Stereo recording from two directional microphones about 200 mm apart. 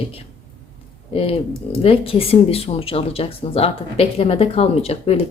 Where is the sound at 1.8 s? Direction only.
30° left (ahead or behind).